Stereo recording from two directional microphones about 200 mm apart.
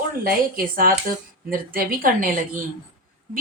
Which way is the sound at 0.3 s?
45° right (ahead or behind).